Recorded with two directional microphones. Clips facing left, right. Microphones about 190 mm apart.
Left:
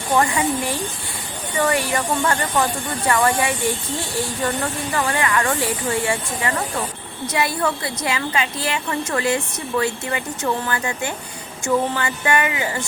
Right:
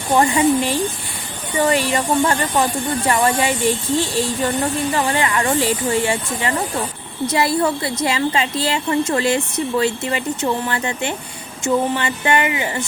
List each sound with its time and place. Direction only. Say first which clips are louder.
0.2 s speech: right 7 dB; 25° right (ahead or behind)
3.7 s speech: right 6 dB; 85° right
4.2 s a woman's voice: right 3 dB; 25° right (ahead or behind)